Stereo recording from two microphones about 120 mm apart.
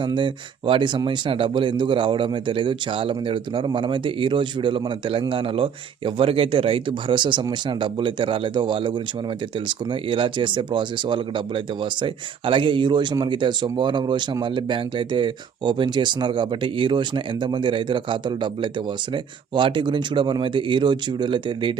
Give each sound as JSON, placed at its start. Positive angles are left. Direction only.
{"t": 0.0, "sound": "speech", "side_deg": -40}